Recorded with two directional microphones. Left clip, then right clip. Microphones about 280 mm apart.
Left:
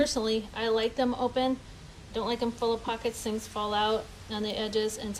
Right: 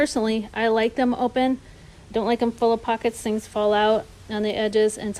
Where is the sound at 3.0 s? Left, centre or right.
Right.